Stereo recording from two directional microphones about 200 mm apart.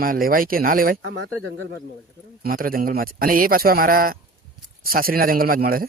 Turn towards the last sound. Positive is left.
turn(degrees=-45)  # may be behind; listen again after turning